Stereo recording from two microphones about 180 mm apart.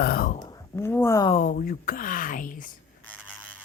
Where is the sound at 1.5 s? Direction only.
55° left (ahead or behind).